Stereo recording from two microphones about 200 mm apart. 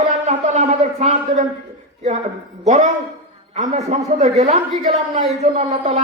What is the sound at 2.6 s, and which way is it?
A man's voice, 35° right (ahead or behind).